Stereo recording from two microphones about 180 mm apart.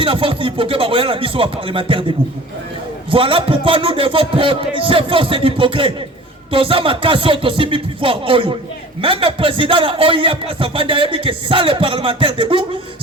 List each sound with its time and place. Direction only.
0.0 s a man's voice: 30° right (ahead or behind)
3.1 s a man's voice: 30° right (ahead or behind)